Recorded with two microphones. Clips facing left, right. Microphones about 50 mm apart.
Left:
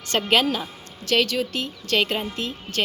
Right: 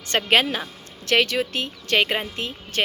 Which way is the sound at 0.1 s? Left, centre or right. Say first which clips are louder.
Right 1 dB; right.